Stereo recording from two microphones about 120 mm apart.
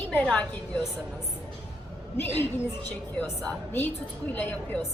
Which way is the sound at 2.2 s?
20° left (ahead or behind).